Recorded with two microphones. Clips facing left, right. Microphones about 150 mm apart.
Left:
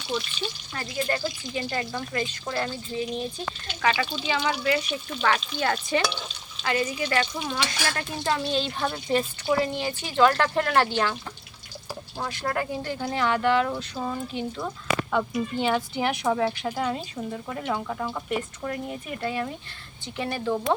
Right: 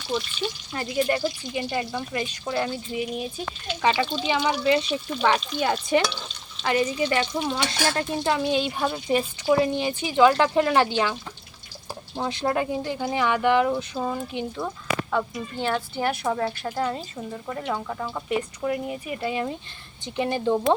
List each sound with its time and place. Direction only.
0.7 s speech: 15° right (ahead or behind)
7.0 s stir: 20° right (ahead or behind)
8.2 s speech: 15° right (ahead or behind)
15.1 s speech: 10° left (ahead or behind)
16.2 s a woman's voice: centre (ahead or behind)
19.3 s stir: 20° right (ahead or behind)